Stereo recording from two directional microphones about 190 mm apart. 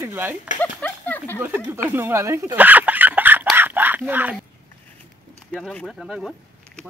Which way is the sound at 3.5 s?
10° right (ahead or behind).